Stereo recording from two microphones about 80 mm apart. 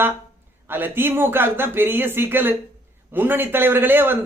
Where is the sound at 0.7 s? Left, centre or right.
Right.